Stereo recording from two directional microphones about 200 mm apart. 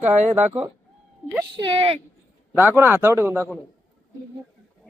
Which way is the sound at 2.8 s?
10° right (ahead or behind).